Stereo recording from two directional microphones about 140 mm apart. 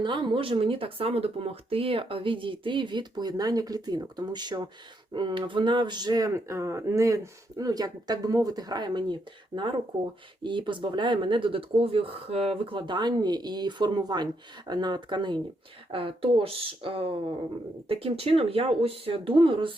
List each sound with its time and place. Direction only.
0.0 s speech: 35° right (ahead or behind)